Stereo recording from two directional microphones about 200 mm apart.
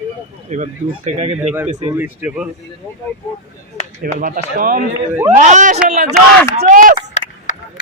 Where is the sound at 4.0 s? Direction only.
40° right (ahead or behind).